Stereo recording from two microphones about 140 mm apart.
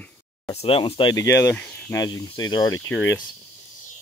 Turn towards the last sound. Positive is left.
turn(degrees=20)  # may be behind; listen again after turning